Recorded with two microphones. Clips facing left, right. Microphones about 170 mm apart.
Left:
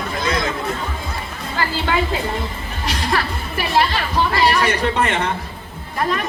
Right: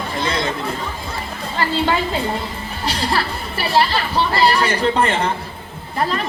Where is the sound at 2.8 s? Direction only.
30° right (ahead or behind).